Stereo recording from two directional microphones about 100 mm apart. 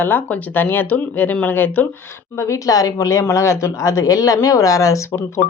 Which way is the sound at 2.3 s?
30° left (ahead or behind).